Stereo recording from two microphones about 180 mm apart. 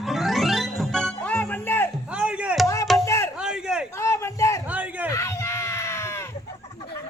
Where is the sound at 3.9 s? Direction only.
15° left (ahead or behind).